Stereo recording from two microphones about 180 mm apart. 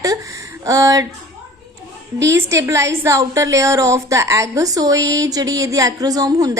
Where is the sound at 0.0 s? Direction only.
20° right (ahead or behind).